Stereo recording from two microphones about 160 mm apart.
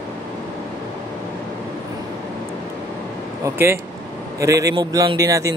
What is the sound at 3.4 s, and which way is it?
A man's voice, 15° right (ahead or behind).